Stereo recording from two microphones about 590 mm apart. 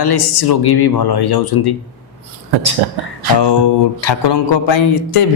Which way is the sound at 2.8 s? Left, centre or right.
Right.